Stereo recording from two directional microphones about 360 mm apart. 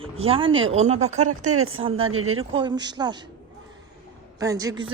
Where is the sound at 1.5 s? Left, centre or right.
Right.